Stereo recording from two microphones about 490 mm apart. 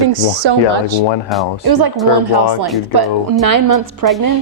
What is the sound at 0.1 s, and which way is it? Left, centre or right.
Speech, right.